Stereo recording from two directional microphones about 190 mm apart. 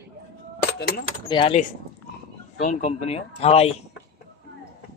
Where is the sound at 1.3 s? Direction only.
25° left (ahead or behind).